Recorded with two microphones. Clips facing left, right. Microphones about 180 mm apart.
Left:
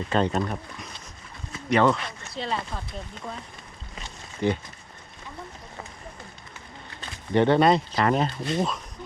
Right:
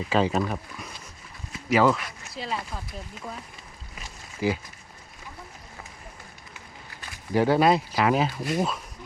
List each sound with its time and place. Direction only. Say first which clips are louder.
0.0 s speech: right 1 dB; 5° right (ahead or behind)
7.3 s speech: left 1 dB; 5° right (ahead or behind)
8.4 s speech: even; 25° left (ahead or behind)